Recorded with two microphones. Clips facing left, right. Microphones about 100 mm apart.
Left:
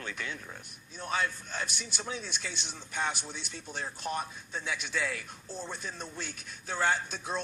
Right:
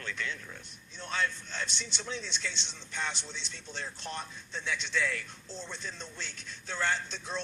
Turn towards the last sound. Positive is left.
turn(degrees=15)  # may be behind; listen again after turning